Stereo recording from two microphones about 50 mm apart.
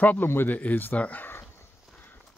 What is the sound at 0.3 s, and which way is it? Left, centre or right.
Speech, left.